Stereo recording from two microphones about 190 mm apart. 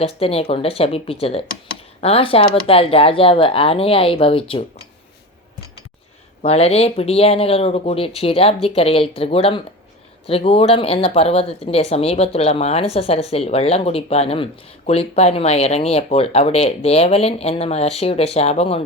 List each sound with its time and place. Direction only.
0.0 s speech: 30° left (ahead or behind)
6.4 s speech: 30° left (ahead or behind)